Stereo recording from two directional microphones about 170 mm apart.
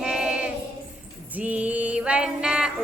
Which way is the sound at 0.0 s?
5° right (ahead or behind).